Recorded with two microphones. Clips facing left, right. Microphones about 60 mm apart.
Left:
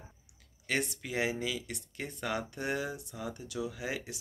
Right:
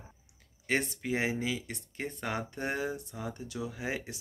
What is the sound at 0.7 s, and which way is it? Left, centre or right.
Speech, right.